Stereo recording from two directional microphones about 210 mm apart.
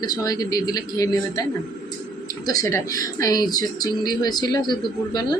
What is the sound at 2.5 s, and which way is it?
Speech, 15° left (ahead or behind).